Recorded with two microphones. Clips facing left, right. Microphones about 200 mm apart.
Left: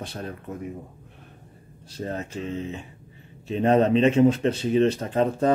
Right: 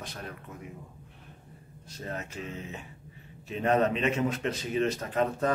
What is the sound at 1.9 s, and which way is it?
Speech, 30° left (ahead or behind).